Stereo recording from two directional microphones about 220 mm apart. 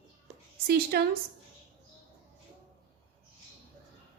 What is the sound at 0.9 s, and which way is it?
Speech, 45° right (ahead or behind).